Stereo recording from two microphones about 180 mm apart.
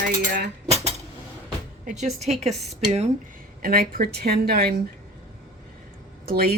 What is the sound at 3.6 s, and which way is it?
A woman's voice, 55° right (ahead or behind).